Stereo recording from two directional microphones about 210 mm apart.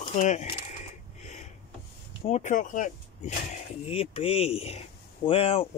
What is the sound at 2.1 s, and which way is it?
Speech, 30° left (ahead or behind).